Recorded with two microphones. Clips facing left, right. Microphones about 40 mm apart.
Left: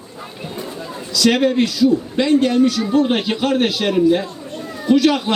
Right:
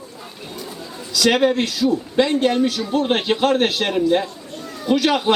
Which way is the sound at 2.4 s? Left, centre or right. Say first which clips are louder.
Left 3 dB; right.